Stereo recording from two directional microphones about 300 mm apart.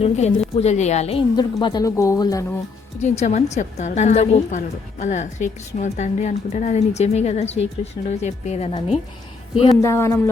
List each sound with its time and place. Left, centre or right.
0.0 s a woman's voice: left
3.0 s a woman's voice: left
9.6 s a woman's voice: centre